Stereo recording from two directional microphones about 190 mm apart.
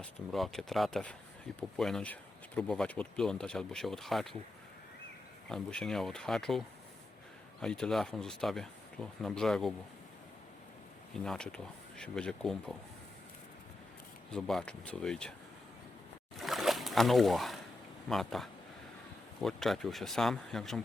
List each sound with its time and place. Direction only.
0.0 s speech: centre (ahead or behind)
5.5 s speech: 5° left (ahead or behind)
7.6 s speech: 5° left (ahead or behind)
11.1 s speech: 5° left (ahead or behind)
14.3 s speech: 5° left (ahead or behind)
16.4 s splash: centre (ahead or behind)
18.1 s speech: centre (ahead or behind)